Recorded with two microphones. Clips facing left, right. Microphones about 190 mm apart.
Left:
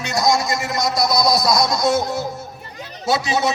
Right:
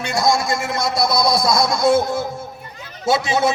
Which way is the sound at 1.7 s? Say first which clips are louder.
Right 3 dB; 55° right (ahead or behind).